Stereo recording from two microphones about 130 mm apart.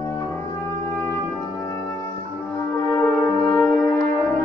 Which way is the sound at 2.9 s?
15° left (ahead or behind).